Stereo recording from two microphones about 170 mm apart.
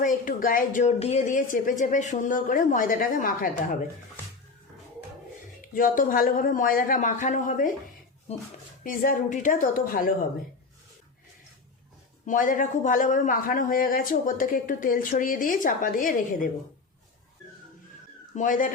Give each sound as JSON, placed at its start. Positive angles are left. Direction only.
{"t": 0.0, "sound": "a man's voice", "side_deg": 50}
{"t": 5.6, "sound": "a man's voice", "side_deg": 55}
{"t": 8.8, "sound": "a man's voice", "side_deg": 55}
{"t": 12.2, "sound": "a man's voice", "side_deg": 50}
{"t": 18.3, "sound": "a man's voice", "side_deg": 50}